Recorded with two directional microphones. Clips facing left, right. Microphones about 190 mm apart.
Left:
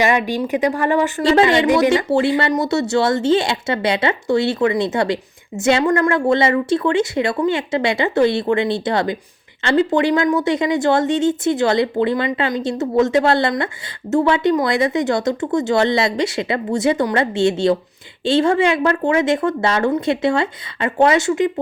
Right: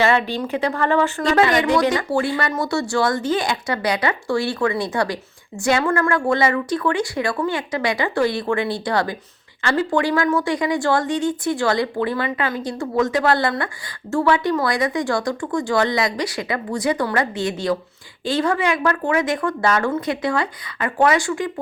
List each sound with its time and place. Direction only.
0.0 s speech: 15° left (ahead or behind)
1.2 s speech: 25° left (ahead or behind)